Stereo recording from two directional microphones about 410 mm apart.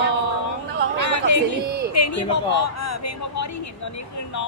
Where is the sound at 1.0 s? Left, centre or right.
Left.